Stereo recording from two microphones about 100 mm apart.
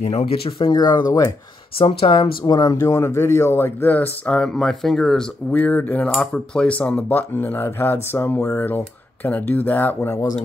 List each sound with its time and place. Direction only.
0.1 s speech: 80° left
0.7 s speech: 45° left (ahead or behind)
1.8 s speech: 70° left (ahead or behind)
2.5 s speech: 35° left (ahead or behind); by 5.2 s 5° left (ahead or behind)
5.5 s speech: 15° left (ahead or behind)